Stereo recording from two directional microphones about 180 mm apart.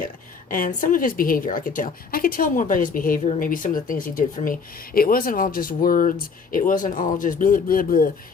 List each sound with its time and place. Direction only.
0.5 s a woman's voice: 50° left (ahead or behind)